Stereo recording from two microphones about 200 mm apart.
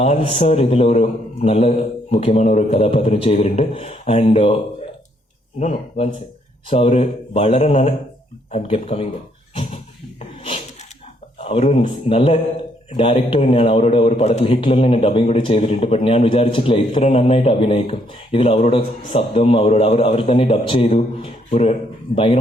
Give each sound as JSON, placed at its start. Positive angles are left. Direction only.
{"t": 0.0, "sound": "a man's voice", "side_deg": 30}
{"t": 5.5, "sound": "a man's voice", "side_deg": 35}
{"t": 11.4, "sound": "a man's voice", "side_deg": 30}